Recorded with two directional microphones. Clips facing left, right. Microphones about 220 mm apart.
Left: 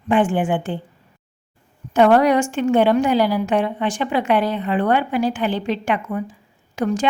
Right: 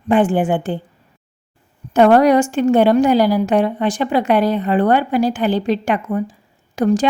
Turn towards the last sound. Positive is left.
turn(degrees=-35)  # may be behind; listen again after turning